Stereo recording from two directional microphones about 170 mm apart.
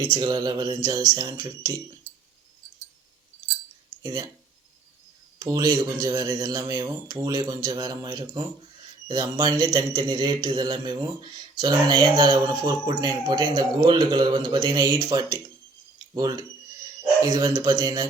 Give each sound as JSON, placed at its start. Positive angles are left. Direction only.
{"t": 0.0, "sound": "speech", "side_deg": -25}
{"t": 4.0, "sound": "speech", "side_deg": -20}
{"t": 5.4, "sound": "speech", "side_deg": -20}